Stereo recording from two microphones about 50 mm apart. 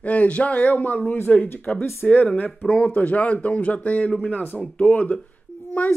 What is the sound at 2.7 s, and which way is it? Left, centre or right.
Speech, left.